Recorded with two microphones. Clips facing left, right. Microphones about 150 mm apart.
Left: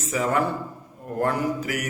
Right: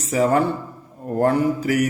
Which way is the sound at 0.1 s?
35° right (ahead or behind).